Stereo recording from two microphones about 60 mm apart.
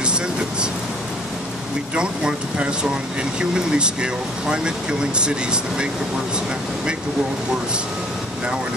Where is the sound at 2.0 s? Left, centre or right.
Centre.